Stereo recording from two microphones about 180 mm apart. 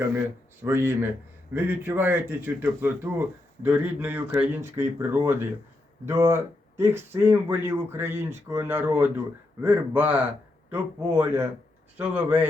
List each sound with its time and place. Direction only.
0.6 s speech: 15° right (ahead or behind)